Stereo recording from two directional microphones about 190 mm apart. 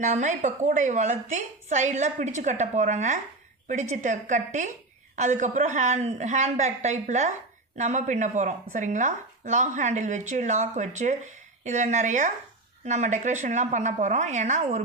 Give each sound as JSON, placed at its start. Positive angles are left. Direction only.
{"t": 0.0, "sound": "speech", "side_deg": -40}